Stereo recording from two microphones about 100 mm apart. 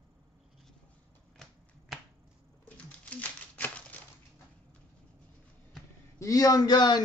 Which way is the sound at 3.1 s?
15° left (ahead or behind).